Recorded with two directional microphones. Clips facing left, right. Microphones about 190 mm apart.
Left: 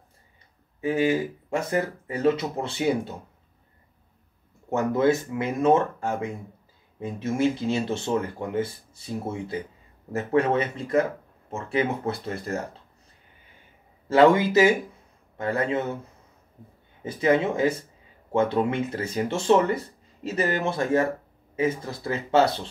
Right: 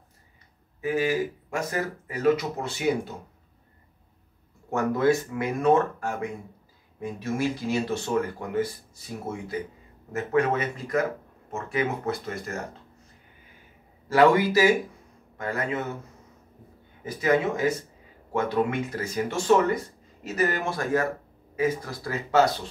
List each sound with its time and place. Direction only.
0.7 s speech: 30° left (ahead or behind)
4.6 s speech: 20° left (ahead or behind)
14.0 s speech: 25° left (ahead or behind)
17.0 s speech: 25° left (ahead or behind)